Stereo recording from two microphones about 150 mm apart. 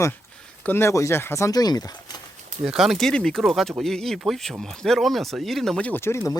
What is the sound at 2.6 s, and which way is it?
Speech, 5° right (ahead or behind).